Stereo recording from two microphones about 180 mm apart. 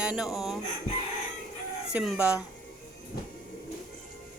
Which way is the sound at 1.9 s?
5° right (ahead or behind).